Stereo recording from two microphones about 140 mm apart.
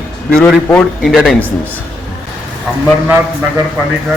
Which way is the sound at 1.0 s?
Centre (ahead or behind).